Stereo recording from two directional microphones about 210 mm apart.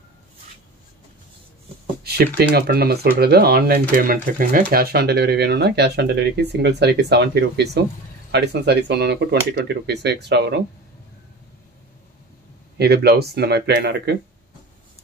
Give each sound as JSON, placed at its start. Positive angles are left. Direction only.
{"t": 2.0, "sound": "speech", "side_deg": -50}
{"t": 12.7, "sound": "speech", "side_deg": -50}